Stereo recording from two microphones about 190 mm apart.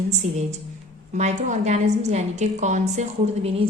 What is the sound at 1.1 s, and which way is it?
A woman's voice, 35° right (ahead or behind).